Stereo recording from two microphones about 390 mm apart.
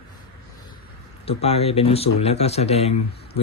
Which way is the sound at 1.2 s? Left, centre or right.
Centre.